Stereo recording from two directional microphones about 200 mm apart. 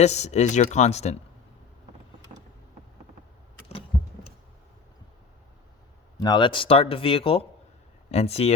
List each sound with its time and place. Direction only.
0.0 s speech: 35° left (ahead or behind)
3.7 s vehicle: 30° left (ahead or behind)
6.1 s speech: 20° left (ahead or behind)